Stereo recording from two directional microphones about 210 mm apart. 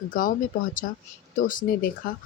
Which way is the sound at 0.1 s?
40° left (ahead or behind).